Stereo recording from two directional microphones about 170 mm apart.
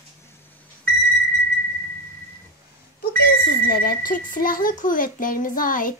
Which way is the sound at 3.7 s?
55° left (ahead or behind).